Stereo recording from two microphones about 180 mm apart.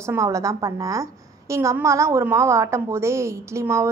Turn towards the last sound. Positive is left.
turn(degrees=-15)  # may be behind; listen again after turning